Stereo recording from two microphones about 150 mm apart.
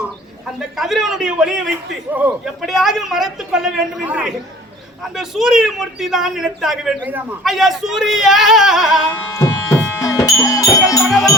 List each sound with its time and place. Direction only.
0.8 s a woman's voice: centre (ahead or behind)
9.3 s music: 20° left (ahead or behind)